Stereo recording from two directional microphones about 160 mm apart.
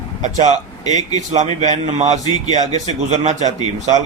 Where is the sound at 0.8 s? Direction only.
25° left (ahead or behind).